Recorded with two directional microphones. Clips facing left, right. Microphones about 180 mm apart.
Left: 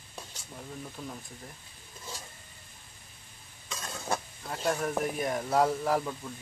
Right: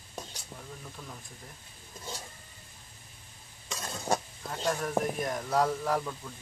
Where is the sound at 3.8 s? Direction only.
20° right (ahead or behind).